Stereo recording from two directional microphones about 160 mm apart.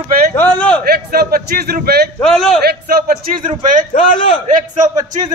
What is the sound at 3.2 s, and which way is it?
A man's voice, 55° right (ahead or behind).